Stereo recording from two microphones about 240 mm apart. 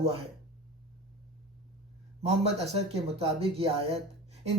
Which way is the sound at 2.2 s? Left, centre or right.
Right.